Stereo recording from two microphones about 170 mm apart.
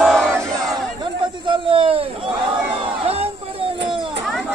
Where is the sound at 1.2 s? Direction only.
30° right (ahead or behind).